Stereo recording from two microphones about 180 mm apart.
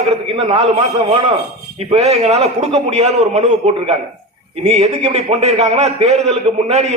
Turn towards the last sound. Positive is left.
turn(degrees=-35)  # may be behind; listen again after turning